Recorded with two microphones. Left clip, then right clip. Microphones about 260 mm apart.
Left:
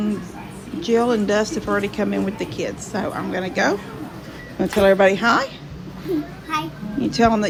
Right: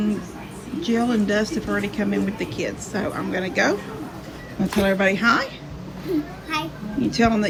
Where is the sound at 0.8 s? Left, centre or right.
Centre.